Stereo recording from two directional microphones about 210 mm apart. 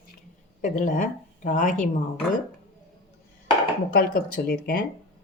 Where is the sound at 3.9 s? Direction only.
45° left (ahead or behind).